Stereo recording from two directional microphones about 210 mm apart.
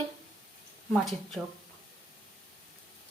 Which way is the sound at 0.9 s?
Centre (ahead or behind).